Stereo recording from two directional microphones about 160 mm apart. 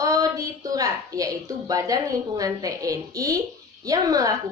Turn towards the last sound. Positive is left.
turn(degrees=-20)  # may be behind; listen again after turning